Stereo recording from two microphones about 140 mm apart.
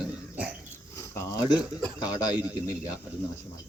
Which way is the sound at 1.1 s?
20° left (ahead or behind).